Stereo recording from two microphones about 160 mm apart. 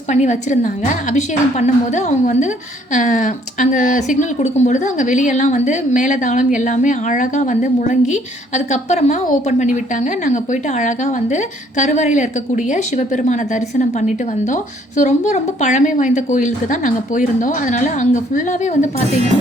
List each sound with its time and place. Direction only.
0.1 s speech: 50° left (ahead or behind)